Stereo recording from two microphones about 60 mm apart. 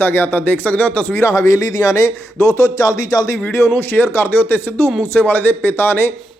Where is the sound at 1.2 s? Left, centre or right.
Left.